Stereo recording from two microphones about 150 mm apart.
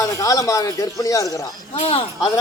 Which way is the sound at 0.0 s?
25° left (ahead or behind).